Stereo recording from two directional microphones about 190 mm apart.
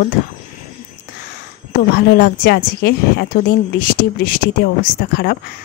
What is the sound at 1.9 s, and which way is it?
A woman's voice, 60° left (ahead or behind).